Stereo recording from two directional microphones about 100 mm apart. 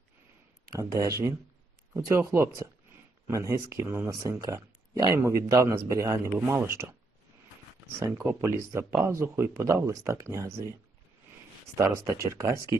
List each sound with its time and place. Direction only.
0.7 s speech: 35° right (ahead or behind)
7.9 s speech: 30° right (ahead or behind)
11.8 s speech: 30° right (ahead or behind)